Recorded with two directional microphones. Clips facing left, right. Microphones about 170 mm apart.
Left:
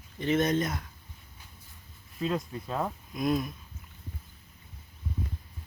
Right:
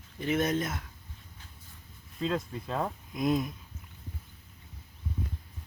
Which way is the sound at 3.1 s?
20° right (ahead or behind).